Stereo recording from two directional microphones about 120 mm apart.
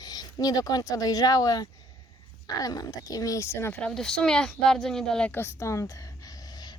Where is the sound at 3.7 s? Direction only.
5° left (ahead or behind); by 5.9 s 25° left (ahead or behind).